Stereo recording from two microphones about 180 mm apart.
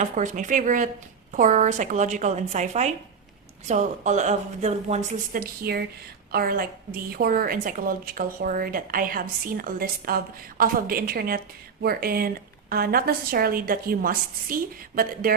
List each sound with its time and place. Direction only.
0.0 s a woman's voice: 45° right (ahead or behind)